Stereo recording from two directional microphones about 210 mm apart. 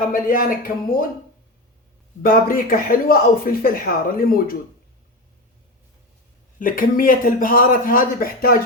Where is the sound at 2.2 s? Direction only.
45° left (ahead or behind).